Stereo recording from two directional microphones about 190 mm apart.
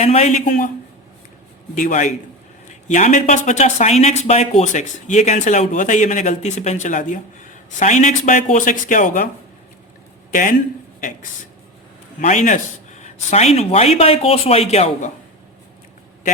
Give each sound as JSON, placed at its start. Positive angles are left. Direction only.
{"t": 0.0, "sound": "speech", "side_deg": 35}
{"t": 1.7, "sound": "speech", "side_deg": 40}
{"t": 12.2, "sound": "speech", "side_deg": 40}